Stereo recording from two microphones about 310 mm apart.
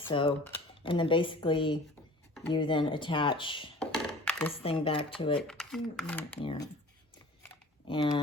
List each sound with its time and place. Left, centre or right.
0.0 s speech: centre
3.8 s a sound: centre
4.6 s speech: centre
5.4 s speech: centre
6.4 s speech: centre
7.4 s a sound: centre